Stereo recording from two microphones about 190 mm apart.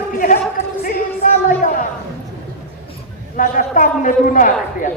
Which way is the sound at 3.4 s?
45° left (ahead or behind).